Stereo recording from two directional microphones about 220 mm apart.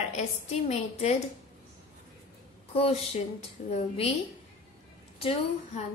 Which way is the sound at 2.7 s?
25° left (ahead or behind).